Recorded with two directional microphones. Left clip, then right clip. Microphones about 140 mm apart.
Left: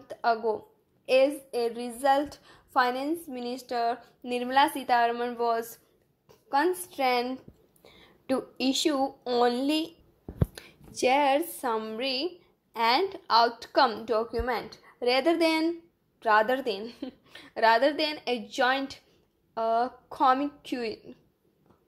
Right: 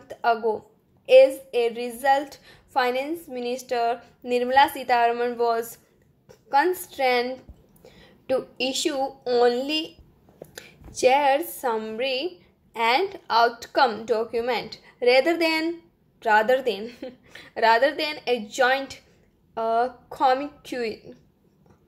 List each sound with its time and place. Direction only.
0.1 s a woman's voice: 30° left (ahead or behind)